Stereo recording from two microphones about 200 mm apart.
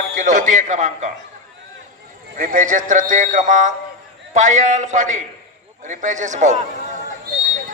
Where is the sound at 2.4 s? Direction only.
40° right (ahead or behind).